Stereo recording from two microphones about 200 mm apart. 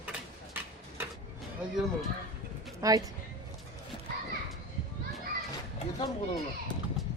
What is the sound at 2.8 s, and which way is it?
Speech, 15° right (ahead or behind).